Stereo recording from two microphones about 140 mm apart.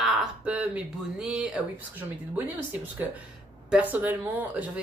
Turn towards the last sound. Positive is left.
turn(degrees=-10)  # may be behind; listen again after turning